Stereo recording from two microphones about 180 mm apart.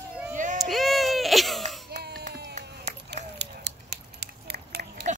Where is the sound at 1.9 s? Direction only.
60° right (ahead or behind).